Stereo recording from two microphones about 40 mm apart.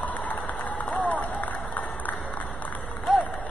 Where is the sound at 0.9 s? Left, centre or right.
Left.